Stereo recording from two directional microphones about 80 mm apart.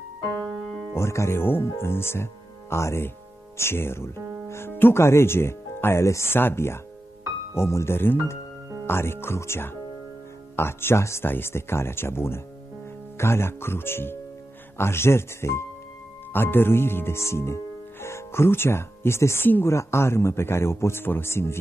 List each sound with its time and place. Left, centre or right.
0.9 s speech: left